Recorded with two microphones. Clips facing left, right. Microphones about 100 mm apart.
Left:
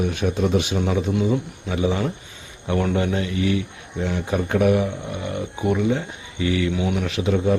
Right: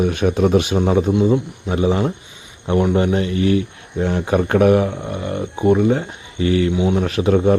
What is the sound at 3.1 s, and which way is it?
Speech, 40° right (ahead or behind).